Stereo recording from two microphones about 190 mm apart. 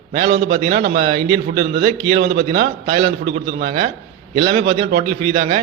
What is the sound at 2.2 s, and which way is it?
Speech, 55° right (ahead or behind).